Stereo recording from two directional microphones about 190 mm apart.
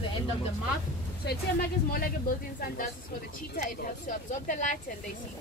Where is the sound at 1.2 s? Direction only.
55° left (ahead or behind).